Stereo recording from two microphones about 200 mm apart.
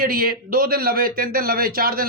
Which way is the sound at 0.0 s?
50° right (ahead or behind).